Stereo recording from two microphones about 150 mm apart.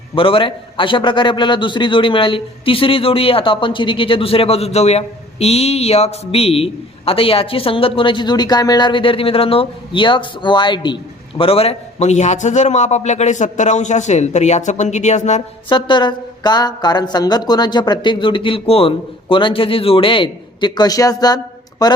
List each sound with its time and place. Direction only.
0.2 s a man's voice: 35° left (ahead or behind)
15.7 s a woman's voice: 30° left (ahead or behind)